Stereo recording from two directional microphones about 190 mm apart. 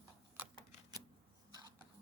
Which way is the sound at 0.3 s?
10° right (ahead or behind).